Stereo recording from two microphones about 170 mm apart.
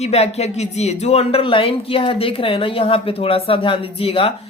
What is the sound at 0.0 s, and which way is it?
Speech, 40° left (ahead or behind).